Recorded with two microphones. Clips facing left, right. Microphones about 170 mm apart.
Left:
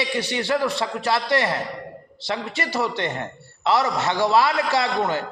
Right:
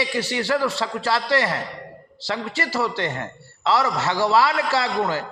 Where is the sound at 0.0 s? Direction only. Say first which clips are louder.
Right 1 dB; 20° left (ahead or behind).